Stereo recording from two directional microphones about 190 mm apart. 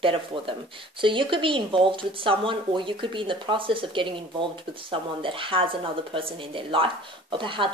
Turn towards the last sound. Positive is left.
turn(degrees=-25)  # may be behind; listen again after turning